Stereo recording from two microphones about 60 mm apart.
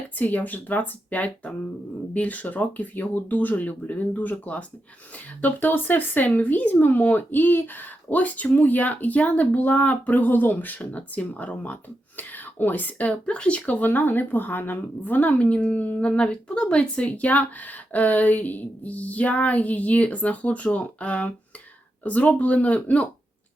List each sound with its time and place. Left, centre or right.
0.2 s speech: left